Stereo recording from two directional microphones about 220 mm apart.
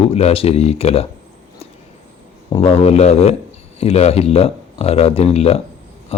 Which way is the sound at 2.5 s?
30° left (ahead or behind).